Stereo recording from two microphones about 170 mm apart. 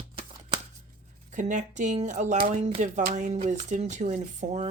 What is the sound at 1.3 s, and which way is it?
Speech, 45° right (ahead or behind).